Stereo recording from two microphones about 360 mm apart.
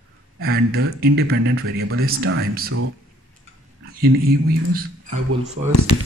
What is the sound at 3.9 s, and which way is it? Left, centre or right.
Speech, right.